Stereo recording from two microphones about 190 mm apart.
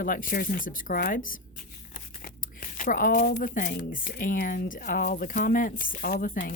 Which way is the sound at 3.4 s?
45° left (ahead or behind).